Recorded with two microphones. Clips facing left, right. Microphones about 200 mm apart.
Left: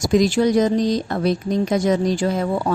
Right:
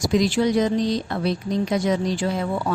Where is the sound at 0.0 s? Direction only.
45° left (ahead or behind).